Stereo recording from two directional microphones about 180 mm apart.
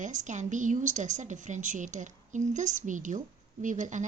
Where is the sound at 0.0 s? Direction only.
45° right (ahead or behind).